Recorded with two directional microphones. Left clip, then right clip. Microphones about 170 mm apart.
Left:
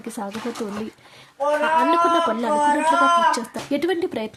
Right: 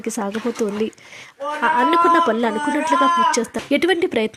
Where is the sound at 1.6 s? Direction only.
20° right (ahead or behind).